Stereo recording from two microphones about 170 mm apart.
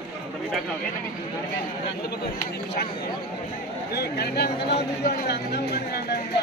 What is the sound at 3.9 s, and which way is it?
Speech, 70° left (ahead or behind).